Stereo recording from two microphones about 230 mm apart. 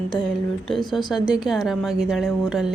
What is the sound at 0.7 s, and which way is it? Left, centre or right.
Speech, centre.